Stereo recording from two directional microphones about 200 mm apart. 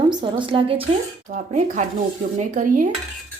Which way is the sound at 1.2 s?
40° right (ahead or behind).